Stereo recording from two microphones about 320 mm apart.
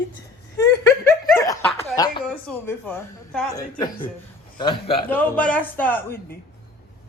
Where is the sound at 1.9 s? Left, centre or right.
Centre.